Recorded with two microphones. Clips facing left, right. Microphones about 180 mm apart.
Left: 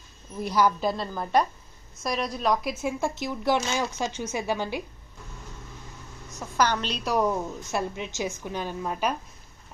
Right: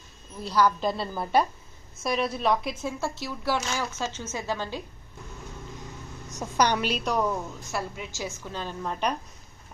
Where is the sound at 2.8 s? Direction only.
15° left (ahead or behind).